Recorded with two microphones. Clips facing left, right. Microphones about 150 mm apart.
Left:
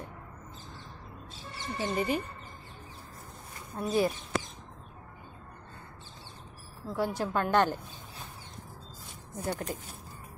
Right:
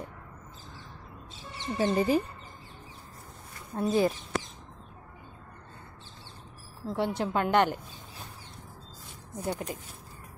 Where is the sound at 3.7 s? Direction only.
25° right (ahead or behind).